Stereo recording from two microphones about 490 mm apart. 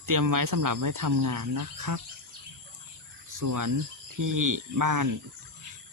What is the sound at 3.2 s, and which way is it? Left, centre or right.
Speech, right.